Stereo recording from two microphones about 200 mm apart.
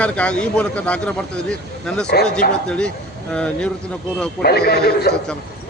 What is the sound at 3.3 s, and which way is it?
Speech, 5° left (ahead or behind).